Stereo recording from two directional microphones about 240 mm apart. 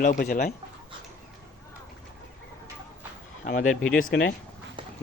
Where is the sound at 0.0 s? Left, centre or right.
Left.